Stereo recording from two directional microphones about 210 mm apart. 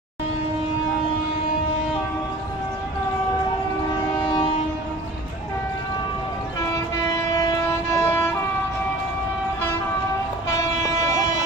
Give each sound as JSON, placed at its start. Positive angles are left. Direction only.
{"t": 4.2, "sound": "train", "side_deg": 20}
{"t": 7.3, "sound": "train", "side_deg": 15}
{"t": 10.8, "sound": "train", "side_deg": 15}